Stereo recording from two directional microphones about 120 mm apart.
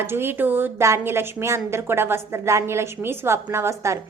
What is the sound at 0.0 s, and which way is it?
A woman's voice, 20° right (ahead or behind).